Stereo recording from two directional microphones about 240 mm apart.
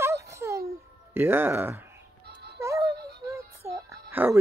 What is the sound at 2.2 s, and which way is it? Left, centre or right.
Music, right.